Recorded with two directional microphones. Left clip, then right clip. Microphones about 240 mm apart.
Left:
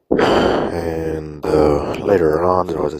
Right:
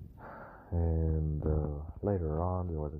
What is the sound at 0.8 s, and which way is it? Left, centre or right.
Mantra, left.